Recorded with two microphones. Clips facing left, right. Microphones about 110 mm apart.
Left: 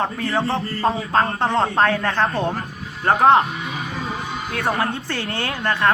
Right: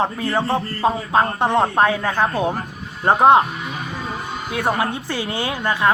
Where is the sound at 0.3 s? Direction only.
10° right (ahead or behind).